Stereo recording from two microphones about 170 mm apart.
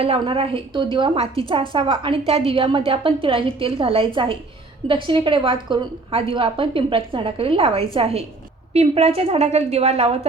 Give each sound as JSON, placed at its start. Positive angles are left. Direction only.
{"t": 0.0, "sound": "a woman's voice", "side_deg": -35}